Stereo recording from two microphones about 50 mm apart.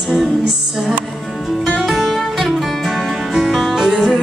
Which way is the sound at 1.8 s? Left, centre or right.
Centre.